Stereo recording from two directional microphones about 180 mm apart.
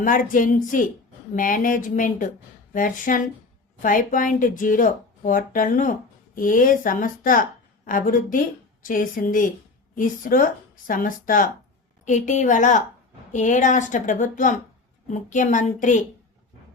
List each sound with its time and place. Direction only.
0.0 s speech: 50° left (ahead or behind)